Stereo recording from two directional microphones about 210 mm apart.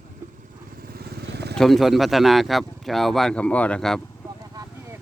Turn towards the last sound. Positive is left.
turn(degrees=5)  # may be behind; listen again after turning